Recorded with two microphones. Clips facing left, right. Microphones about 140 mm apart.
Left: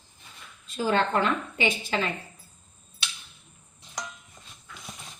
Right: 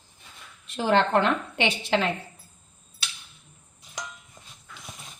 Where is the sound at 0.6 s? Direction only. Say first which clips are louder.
Right 3 dB; 70° right (ahead or behind).